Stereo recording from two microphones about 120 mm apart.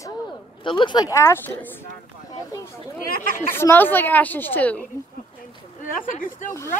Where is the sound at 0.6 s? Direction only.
40° left (ahead or behind); by 1.7 s 20° left (ahead or behind).